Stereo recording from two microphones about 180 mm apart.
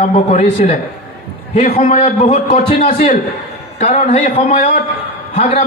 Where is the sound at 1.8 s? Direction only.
50° left (ahead or behind).